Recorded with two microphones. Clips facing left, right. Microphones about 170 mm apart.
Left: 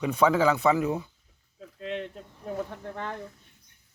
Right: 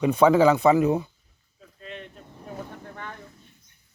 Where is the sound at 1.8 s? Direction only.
90° left.